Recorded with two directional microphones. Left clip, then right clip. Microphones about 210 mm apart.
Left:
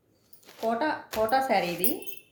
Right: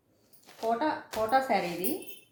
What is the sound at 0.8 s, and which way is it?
Speech, 35° left (ahead or behind).